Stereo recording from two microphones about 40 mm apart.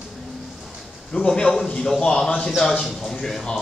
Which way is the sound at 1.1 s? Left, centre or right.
Left.